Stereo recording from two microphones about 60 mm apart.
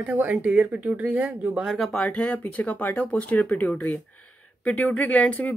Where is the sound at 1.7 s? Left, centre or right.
Centre.